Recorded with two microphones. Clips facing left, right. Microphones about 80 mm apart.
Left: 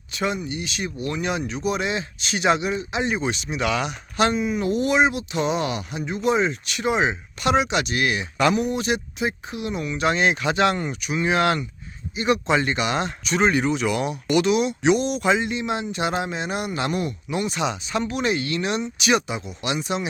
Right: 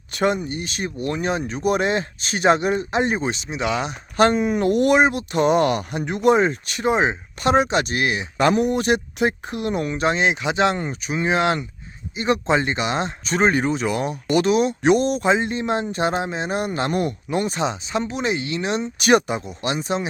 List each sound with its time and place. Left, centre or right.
0.1 s speech: right
4.2 s speech: right
8.4 s speech: right
15.2 s speech: right
18.9 s speech: right